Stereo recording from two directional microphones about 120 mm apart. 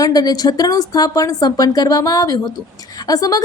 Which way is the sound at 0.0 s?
30° left (ahead or behind).